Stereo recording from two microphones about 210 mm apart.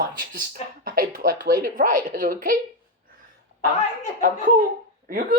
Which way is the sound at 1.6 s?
40° right (ahead or behind).